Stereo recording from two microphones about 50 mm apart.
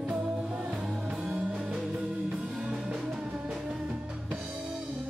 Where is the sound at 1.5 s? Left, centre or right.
Centre.